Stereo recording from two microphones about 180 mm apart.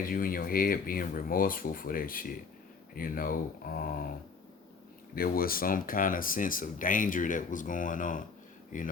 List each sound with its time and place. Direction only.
0.0 s speech: 50° left (ahead or behind)
5.1 s speech: 55° left (ahead or behind)